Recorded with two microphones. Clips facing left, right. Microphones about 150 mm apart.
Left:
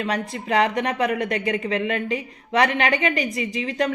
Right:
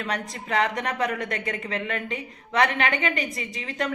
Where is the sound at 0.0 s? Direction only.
30° left (ahead or behind).